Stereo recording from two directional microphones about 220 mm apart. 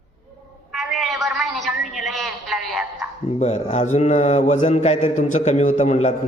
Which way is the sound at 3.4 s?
30° left (ahead or behind).